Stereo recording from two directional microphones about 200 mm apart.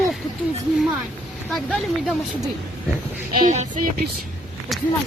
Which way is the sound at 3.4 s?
40° right (ahead or behind).